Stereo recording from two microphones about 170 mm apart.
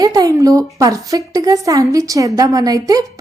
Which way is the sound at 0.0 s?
20° right (ahead or behind).